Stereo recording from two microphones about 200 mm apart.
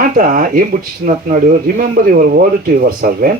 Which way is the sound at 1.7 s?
45° right (ahead or behind).